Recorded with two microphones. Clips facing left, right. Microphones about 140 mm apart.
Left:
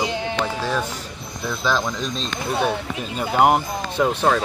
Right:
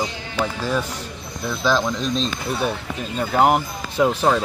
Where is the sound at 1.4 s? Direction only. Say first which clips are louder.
Right 2 dB; centre (ahead or behind).